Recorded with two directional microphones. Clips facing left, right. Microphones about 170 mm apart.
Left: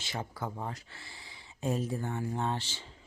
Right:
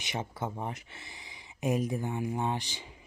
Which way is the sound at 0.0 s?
20° right (ahead or behind).